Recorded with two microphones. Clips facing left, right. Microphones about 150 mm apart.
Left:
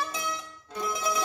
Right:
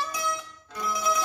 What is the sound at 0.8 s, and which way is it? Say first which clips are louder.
Mandolin: right 2 dB; 25° left (ahead or behind).